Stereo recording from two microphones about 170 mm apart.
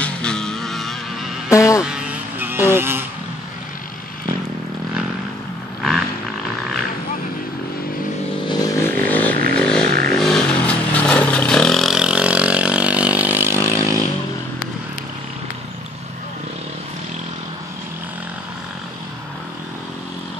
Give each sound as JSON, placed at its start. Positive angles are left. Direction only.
{"t": 0.0, "sound": "music", "side_deg": 5}
{"t": 1.5, "sound": "buzz", "side_deg": 20}
{"t": 1.9, "sound": "vehicle", "side_deg": -10}
{"t": 5.8, "sound": "a sound", "side_deg": 0}
{"t": 8.5, "sound": "a sound", "side_deg": 20}
{"t": 9.6, "sound": "vehicle", "side_deg": 5}